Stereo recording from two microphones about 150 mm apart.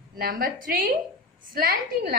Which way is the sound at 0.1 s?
80° right.